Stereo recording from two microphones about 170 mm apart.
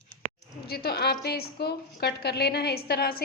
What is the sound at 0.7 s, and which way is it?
A woman's voice, 65° left (ahead or behind).